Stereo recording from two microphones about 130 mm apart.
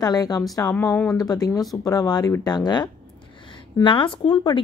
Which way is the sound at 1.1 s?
30° left (ahead or behind).